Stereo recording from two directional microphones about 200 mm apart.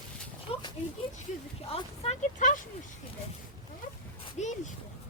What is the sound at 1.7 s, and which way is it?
Speech, 35° left (ahead or behind).